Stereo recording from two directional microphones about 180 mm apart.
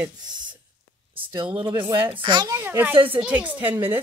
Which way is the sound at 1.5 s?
25° right (ahead or behind).